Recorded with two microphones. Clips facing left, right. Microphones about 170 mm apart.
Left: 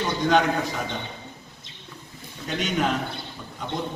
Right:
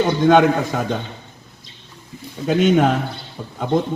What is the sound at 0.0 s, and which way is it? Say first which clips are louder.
Speech: right 8 dB; 50° right (ahead or behind).